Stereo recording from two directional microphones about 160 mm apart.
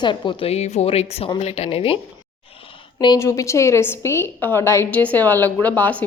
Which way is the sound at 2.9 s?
20° left (ahead or behind).